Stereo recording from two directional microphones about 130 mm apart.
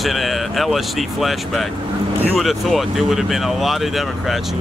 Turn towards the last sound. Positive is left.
turn(degrees=0)  # may be behind; listen again after turning